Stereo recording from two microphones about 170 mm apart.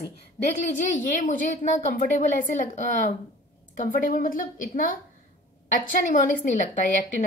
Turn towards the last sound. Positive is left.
turn(degrees=50)  # may be behind; listen again after turning